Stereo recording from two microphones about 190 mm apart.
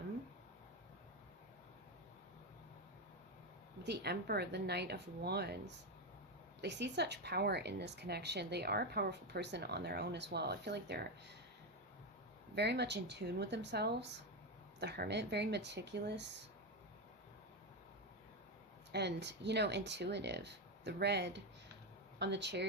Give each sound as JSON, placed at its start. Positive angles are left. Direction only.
{"t": 3.8, "sound": "a woman's voice", "side_deg": -60}
{"t": 12.5, "sound": "a woman's voice", "side_deg": -60}
{"t": 18.9, "sound": "a woman's voice", "side_deg": -60}